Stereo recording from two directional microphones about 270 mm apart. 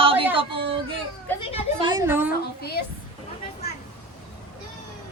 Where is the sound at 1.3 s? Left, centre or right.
Centre.